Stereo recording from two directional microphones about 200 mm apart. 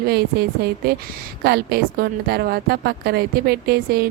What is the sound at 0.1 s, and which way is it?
A woman's voice, 55° right (ahead or behind).